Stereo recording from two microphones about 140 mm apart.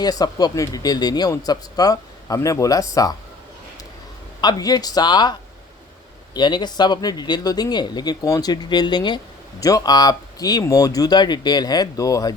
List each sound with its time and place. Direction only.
0.0 s speech: 30° left (ahead or behind)
4.4 s speech: 30° left (ahead or behind)
6.3 s speech: 30° left (ahead or behind)